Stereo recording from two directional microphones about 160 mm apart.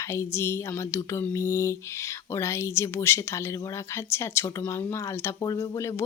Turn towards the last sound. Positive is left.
turn(degrees=20)  # may be behind; listen again after turning